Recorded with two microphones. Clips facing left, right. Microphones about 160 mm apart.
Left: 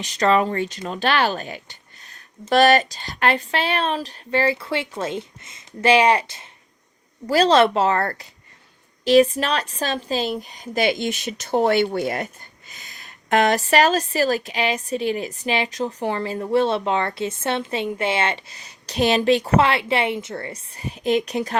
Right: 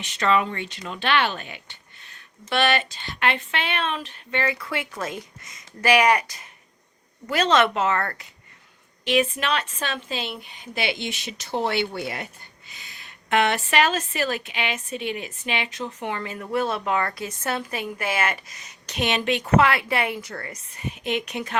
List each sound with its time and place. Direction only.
0.0 s a woman's voice: 40° left (ahead or behind)